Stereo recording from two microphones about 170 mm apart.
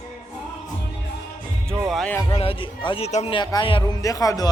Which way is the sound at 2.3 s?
30° left (ahead or behind).